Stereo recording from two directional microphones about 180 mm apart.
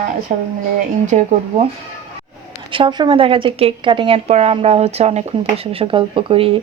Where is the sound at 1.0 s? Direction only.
40° right (ahead or behind).